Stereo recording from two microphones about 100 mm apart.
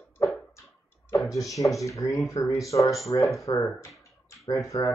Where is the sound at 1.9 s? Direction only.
30° left (ahead or behind).